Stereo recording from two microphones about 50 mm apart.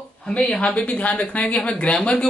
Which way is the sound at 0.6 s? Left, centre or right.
Left.